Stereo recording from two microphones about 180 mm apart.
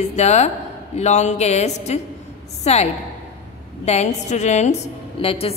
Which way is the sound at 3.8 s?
40° left (ahead or behind).